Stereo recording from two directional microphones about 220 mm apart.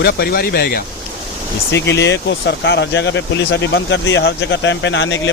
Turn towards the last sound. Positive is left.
turn(degrees=55)  # may be behind; listen again after turning